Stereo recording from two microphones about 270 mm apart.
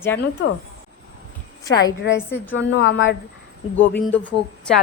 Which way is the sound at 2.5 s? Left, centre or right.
Left.